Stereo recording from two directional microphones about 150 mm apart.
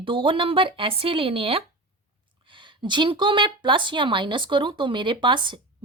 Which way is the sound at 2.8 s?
30° right (ahead or behind).